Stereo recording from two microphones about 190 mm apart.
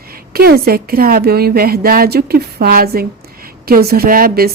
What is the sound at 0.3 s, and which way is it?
A woman's voice, 55° right (ahead or behind).